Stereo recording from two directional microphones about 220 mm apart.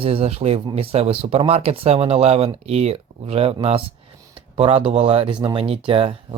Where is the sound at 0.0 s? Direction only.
25° right (ahead or behind).